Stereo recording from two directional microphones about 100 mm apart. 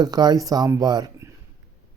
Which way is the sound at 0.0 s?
40° right (ahead or behind).